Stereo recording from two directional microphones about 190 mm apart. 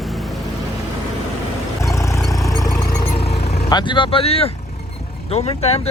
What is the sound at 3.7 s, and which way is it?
Speech, 25° left (ahead or behind).